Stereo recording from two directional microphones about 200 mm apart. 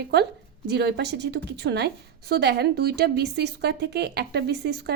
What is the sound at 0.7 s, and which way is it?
A woman's voice, 55° right (ahead or behind).